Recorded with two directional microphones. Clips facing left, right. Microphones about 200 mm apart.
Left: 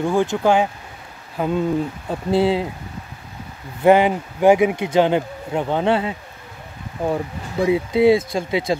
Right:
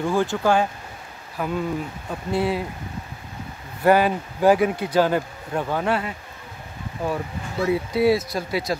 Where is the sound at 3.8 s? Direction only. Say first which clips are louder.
Left 4 dB; 20° left (ahead or behind).